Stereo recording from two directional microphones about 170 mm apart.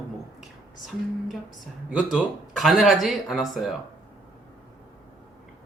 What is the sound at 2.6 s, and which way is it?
Speech, centre (ahead or behind).